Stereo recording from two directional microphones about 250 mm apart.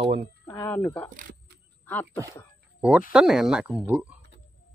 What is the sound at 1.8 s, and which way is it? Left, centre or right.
Cough, centre.